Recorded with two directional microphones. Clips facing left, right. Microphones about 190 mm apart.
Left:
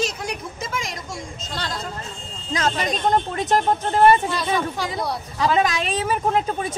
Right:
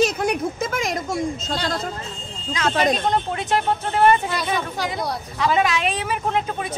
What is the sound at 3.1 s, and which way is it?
A woman's voice, 40° left (ahead or behind).